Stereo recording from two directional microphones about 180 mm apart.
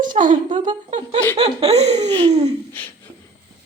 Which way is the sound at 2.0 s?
25° right (ahead or behind).